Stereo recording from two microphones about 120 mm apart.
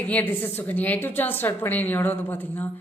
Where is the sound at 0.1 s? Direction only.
15° left (ahead or behind).